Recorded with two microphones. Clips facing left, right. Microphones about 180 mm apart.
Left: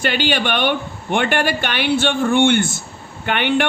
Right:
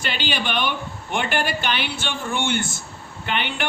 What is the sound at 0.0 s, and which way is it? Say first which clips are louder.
A man's voice: left 7 dB; 60° left (ahead or behind).